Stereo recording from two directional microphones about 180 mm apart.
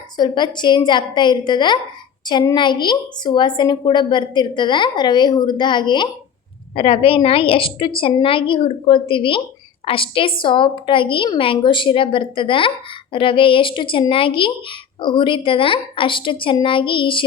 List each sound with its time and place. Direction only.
0.2 s speech: 25° left (ahead or behind)